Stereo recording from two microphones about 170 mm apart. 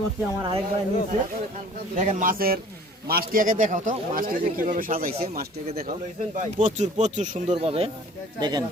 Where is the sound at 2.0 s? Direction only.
45° right (ahead or behind).